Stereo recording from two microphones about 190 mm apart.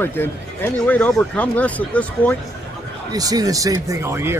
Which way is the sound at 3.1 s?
20° right (ahead or behind).